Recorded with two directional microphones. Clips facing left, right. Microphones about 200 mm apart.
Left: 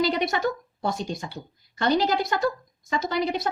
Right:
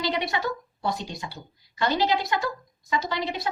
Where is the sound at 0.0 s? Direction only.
45° left (ahead or behind).